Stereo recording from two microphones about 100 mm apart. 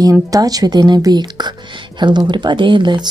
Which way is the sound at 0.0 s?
35° right (ahead or behind).